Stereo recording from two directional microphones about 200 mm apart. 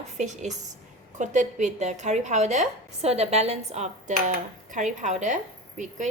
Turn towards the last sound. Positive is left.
turn(degrees=-35)  # may be behind; listen again after turning